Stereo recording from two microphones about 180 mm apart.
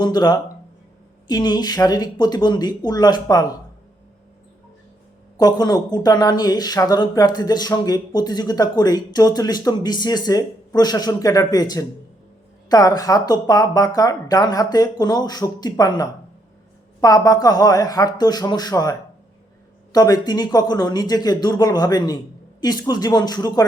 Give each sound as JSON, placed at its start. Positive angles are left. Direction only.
{"t": 0.0, "sound": "speech", "side_deg": 20}
{"t": 5.4, "sound": "speech", "side_deg": 20}